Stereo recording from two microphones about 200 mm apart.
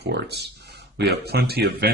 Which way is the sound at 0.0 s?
55° right (ahead or behind).